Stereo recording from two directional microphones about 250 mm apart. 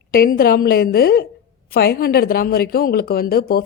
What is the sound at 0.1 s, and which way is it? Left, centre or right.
A woman's voice, left.